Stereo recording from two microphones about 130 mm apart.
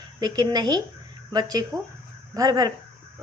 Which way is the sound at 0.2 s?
30° right (ahead or behind).